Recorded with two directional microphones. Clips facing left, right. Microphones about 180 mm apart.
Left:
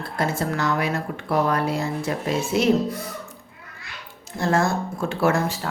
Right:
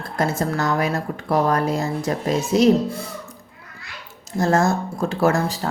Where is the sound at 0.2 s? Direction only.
45° right (ahead or behind).